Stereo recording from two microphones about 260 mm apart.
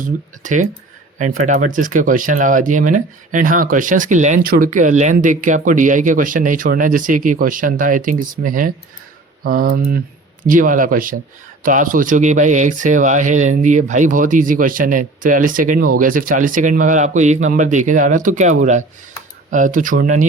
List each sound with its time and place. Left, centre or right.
0.0 s speech: right